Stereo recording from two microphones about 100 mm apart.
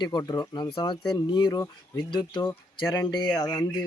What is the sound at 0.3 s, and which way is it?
Speech, 45° left (ahead or behind).